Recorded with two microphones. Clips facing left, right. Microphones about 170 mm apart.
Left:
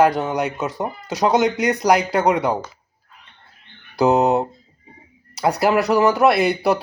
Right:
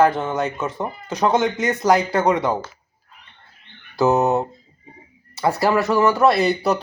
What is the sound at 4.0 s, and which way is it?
Speech, 15° left (ahead or behind).